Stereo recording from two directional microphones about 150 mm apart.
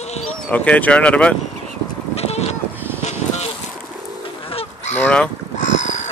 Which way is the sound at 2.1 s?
45° left (ahead or behind).